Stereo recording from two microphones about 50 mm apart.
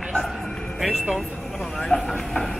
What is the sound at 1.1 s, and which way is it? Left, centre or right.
Speech, centre.